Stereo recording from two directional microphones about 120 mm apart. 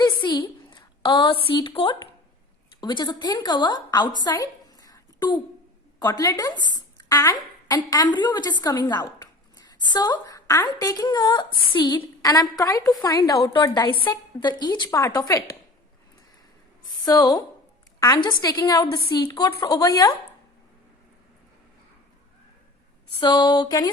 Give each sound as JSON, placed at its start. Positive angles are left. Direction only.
{"t": 0.0, "sound": "a sound", "side_deg": 40}
{"t": 2.8, "sound": "speech", "side_deg": 35}
{"t": 4.2, "sound": "a sound", "side_deg": 30}
{"t": 6.0, "sound": "a woman's voice", "side_deg": 30}
{"t": 17.1, "sound": "a woman's voice", "side_deg": 35}
{"t": 23.2, "sound": "speech", "side_deg": 40}